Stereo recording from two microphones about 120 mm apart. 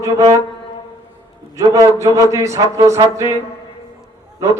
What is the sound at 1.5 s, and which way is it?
Speech, 25° right (ahead or behind).